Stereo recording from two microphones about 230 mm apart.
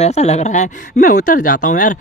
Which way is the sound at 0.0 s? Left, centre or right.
Left.